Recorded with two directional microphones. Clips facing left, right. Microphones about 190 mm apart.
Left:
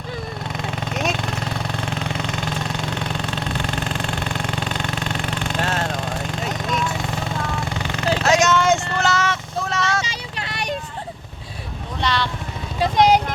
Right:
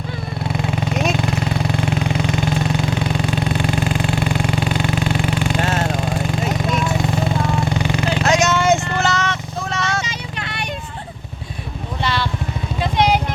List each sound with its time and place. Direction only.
0.4 s vehicle: 10° right (ahead or behind)
9.1 s vehicle: 10° left (ahead or behind)
10.1 s clip-clop: 35° left (ahead or behind)
12.0 s vehicle: 5° right (ahead or behind)
12.8 s vehicle: 40° left (ahead or behind)